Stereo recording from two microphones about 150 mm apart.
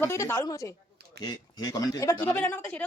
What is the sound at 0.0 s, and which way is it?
A woman's voice, 15° left (ahead or behind).